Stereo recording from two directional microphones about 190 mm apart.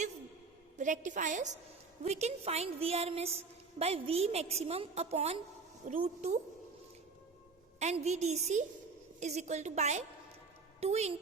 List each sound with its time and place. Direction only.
0.8 s a woman's voice: 40° right (ahead or behind)
7.8 s a woman's voice: 35° right (ahead or behind)